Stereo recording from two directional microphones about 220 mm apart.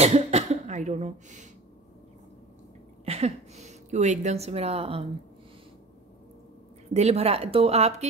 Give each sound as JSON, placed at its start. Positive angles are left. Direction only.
{"t": 0.0, "sound": "cough", "side_deg": -30}
{"t": 3.1, "sound": "a woman's voice", "side_deg": -30}
{"t": 6.9, "sound": "speech", "side_deg": -30}